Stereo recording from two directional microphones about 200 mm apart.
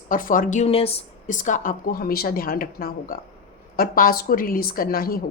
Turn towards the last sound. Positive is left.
turn(degrees=45)  # may be behind; listen again after turning